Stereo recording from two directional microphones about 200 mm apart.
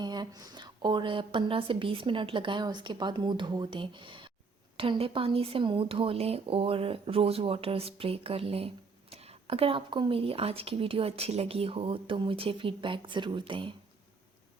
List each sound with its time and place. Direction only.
0.0 s speech: 20° right (ahead or behind)